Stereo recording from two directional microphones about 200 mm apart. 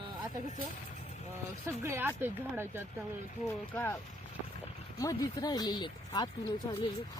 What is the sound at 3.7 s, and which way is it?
Speech, 10° left (ahead or behind).